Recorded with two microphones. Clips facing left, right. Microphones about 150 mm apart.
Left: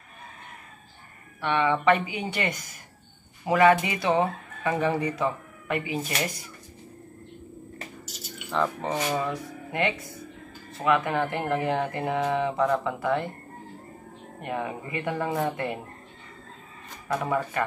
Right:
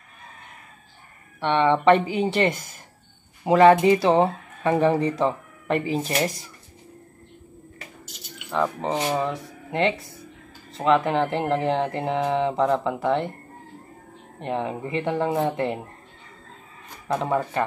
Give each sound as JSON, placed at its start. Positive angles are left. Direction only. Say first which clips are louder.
{"t": 1.4, "sound": "speech", "louder": "right 4 dB", "side_deg": -30}
{"t": 8.5, "sound": "speech", "louder": "right 2 dB", "side_deg": -15}
{"t": 8.8, "sound": "speech", "louder": "right 3 dB", "side_deg": -25}
{"t": 14.4, "sound": "speech", "louder": "right 4 dB", "side_deg": -25}
{"t": 17.1, "sound": "speech", "louder": "right 3 dB", "side_deg": -25}